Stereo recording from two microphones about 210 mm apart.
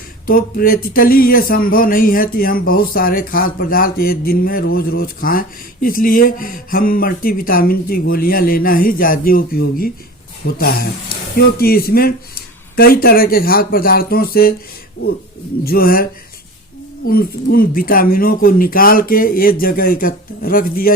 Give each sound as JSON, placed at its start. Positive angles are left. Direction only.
{"t": 0.3, "sound": "speech", "side_deg": 45}
{"t": 15.6, "sound": "speech", "side_deg": 45}
{"t": 17.1, "sound": "speech", "side_deg": 45}